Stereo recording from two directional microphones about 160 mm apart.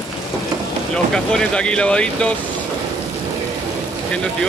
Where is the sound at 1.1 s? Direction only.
5° left (ahead or behind).